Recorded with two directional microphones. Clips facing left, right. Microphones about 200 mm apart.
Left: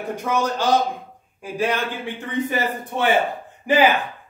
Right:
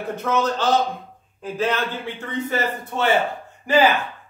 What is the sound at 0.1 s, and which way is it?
A man's voice, 10° left (ahead or behind).